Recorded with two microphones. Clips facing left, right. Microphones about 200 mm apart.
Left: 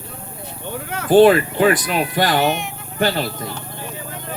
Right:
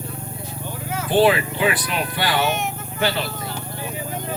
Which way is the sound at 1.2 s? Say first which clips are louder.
Left 5 dB; 45° left (ahead or behind).